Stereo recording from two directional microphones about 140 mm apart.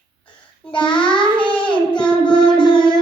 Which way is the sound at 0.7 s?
35° left (ahead or behind).